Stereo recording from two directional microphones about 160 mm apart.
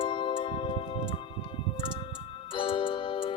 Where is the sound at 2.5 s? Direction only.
35° left (ahead or behind).